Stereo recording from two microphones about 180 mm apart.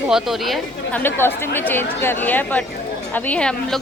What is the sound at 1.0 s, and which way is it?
A woman's voice, 10° left (ahead or behind).